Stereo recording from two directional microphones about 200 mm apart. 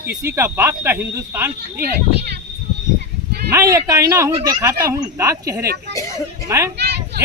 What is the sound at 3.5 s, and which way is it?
A man's voice, 15° right (ahead or behind).